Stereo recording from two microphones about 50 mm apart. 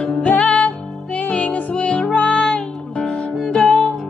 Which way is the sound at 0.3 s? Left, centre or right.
Left.